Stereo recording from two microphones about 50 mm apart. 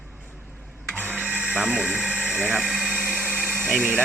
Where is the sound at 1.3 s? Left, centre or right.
Centre.